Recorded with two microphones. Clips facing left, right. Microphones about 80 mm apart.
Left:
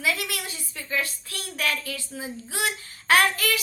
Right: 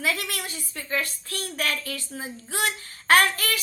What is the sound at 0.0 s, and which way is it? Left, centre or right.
A woman's voice, right.